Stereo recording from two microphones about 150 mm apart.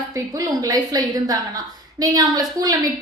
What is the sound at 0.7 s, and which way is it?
A woman's voice, 25° right (ahead or behind).